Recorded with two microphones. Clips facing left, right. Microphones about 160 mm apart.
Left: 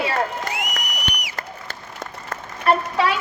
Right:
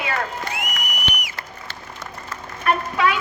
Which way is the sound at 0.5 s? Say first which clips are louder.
Left 1 dB; 50° right (ahead or behind).